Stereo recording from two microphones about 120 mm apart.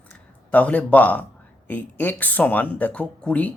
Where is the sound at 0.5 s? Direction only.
15° left (ahead or behind).